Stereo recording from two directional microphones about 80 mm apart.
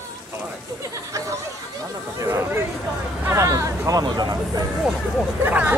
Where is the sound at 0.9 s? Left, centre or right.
Right.